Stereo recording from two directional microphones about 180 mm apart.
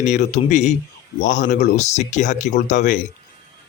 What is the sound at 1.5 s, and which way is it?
Speech, 40° left (ahead or behind).